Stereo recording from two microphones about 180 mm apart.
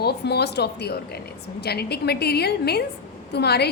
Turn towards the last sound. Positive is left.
turn(degrees=65)  # may be behind; listen again after turning